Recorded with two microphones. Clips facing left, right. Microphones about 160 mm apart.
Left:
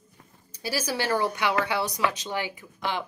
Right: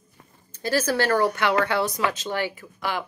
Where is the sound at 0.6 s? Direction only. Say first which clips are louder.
Right 6 dB; 10° left (ahead or behind).